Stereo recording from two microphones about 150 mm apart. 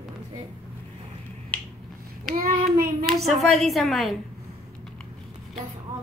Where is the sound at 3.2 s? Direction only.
Centre (ahead or behind).